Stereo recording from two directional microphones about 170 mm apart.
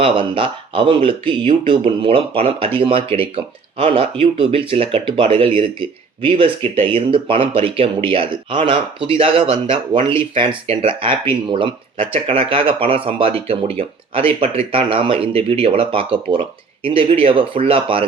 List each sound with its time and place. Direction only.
0.0 s speech: 30° right (ahead or behind)